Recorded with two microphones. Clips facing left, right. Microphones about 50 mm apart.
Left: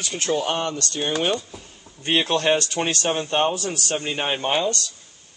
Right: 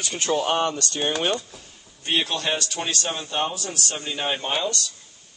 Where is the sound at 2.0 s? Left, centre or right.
Left.